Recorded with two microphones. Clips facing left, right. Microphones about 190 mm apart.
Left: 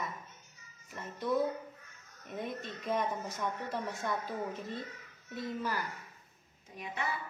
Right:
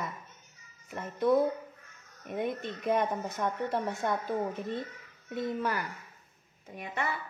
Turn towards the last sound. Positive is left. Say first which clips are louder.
# right 4 dB
turn(degrees=-55)  # may be behind; listen again after turning